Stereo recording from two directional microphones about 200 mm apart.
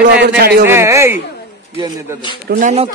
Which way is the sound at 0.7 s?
15° right (ahead or behind).